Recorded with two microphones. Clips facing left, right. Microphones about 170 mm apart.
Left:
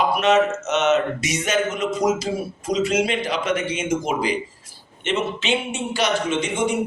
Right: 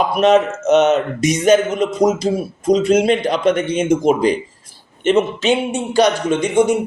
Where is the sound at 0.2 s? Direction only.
40° right (ahead or behind).